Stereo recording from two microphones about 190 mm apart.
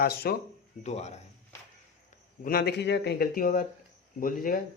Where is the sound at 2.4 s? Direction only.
50° left (ahead or behind).